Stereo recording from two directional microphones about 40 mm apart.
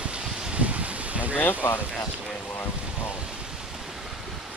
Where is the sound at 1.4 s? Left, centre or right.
Left.